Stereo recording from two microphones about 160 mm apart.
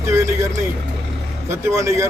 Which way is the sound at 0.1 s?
20° right (ahead or behind).